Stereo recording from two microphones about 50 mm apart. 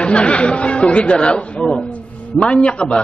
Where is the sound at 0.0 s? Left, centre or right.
Left.